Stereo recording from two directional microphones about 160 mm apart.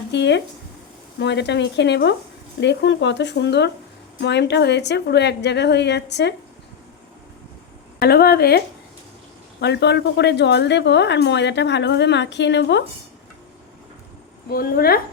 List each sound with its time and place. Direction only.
0.1 s a woman's voice: 90° left
7.9 s speech: 75° left (ahead or behind)
9.6 s a woman's voice: 90° left
14.5 s speech: 70° left (ahead or behind)